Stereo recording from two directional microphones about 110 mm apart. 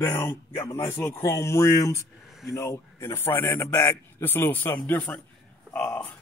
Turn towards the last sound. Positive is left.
turn(degrees=15)  # may be behind; listen again after turning